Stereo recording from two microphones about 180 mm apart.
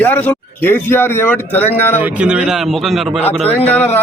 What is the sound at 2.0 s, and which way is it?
A man's voice, 10° right (ahead or behind).